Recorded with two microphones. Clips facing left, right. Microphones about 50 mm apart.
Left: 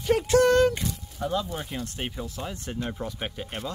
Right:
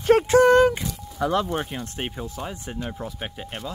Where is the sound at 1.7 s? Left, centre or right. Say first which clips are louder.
Right 2 dB; right.